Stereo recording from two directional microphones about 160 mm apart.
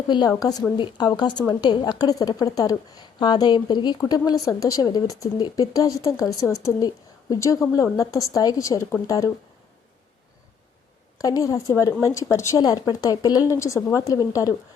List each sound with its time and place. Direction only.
0.1 s a woman's voice: 25° left (ahead or behind)
11.2 s a woman's voice: 20° left (ahead or behind)